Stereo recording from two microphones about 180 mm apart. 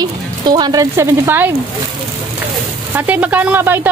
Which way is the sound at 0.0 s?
20° right (ahead or behind).